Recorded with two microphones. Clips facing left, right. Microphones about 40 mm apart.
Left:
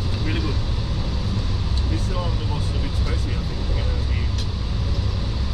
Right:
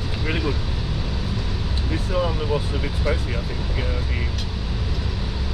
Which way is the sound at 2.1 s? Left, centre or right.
Right.